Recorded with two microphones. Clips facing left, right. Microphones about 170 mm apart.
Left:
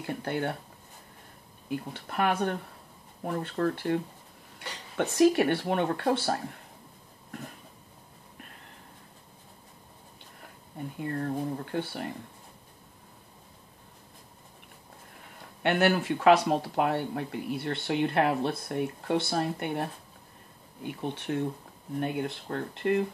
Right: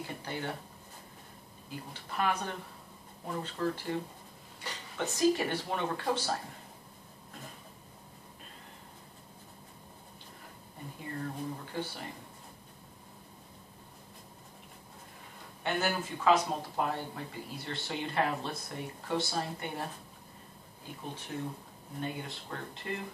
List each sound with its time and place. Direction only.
0.0 s speech: 60° left (ahead or behind)
1.7 s speech: 60° left (ahead or behind)
11.0 s speech: 60° left (ahead or behind)
15.6 s speech: 70° left (ahead or behind)